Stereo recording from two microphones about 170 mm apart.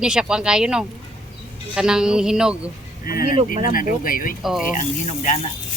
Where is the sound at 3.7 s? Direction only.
55° left (ahead or behind).